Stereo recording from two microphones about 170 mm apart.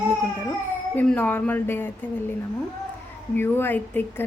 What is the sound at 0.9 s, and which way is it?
Speech, 10° left (ahead or behind).